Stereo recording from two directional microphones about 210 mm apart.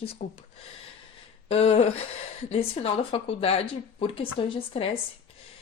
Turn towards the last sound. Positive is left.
turn(degrees=25)  # may be behind; listen again after turning